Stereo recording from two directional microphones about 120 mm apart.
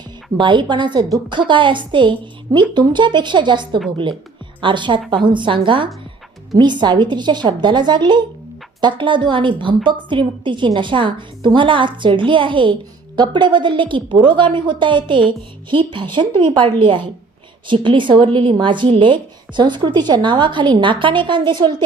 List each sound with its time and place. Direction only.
0.3 s a woman's voice: 40° right (ahead or behind)